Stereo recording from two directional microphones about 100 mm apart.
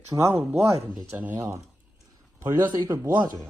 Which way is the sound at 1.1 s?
15° right (ahead or behind).